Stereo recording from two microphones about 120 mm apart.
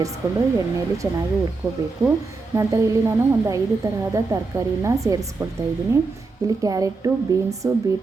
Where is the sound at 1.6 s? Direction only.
25° right (ahead or behind).